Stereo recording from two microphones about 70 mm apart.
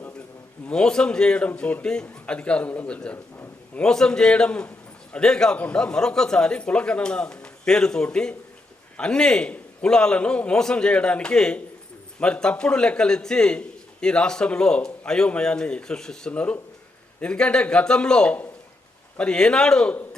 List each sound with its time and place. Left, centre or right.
0.7 s a man's voice: centre